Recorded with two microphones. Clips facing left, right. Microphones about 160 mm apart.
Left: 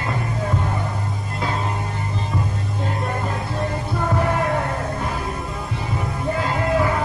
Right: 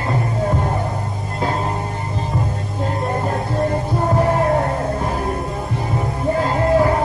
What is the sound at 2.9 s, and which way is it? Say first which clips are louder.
Music: right 5 dB; 35° right (ahead or behind).